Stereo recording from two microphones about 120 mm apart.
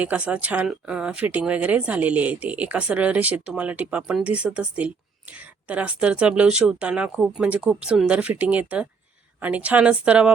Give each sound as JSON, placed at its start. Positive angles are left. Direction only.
{"t": 0.0, "sound": "speech", "side_deg": -10}